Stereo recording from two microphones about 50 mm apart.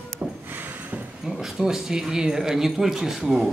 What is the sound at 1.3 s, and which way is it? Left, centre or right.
Speech, centre.